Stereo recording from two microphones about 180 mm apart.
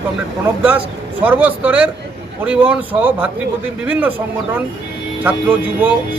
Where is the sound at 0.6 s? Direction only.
10° right (ahead or behind).